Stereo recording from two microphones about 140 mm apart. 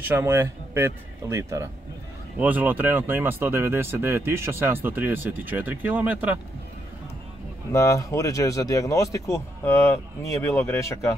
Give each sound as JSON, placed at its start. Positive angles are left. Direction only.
{"t": 0.0, "sound": "speech", "side_deg": -15}
{"t": 7.7, "sound": "speech", "side_deg": 25}